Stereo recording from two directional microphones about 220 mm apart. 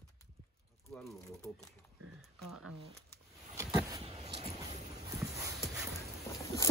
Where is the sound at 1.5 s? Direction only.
5° left (ahead or behind).